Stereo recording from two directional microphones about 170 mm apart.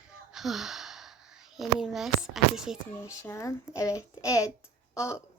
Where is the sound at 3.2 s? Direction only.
15° left (ahead or behind).